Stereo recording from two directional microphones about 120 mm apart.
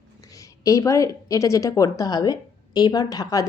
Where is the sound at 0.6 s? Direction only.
25° left (ahead or behind).